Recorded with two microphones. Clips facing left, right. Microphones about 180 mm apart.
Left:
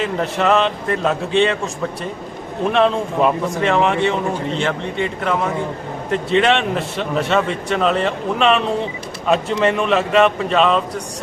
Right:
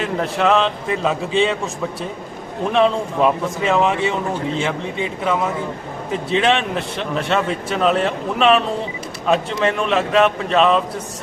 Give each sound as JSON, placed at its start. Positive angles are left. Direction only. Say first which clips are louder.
{"t": 0.0, "sound": "a man's voice", "louder": "even", "side_deg": 0}